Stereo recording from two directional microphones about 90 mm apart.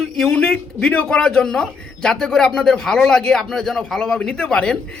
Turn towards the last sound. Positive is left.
turn(degrees=10)  # may be behind; listen again after turning